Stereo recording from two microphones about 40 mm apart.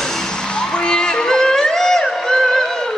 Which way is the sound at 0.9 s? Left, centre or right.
Centre.